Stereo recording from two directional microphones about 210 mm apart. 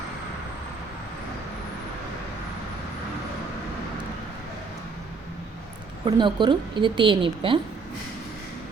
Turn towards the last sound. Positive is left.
turn(degrees=-25)  # may be behind; listen again after turning